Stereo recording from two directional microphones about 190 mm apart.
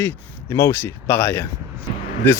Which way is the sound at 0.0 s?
15° left (ahead or behind).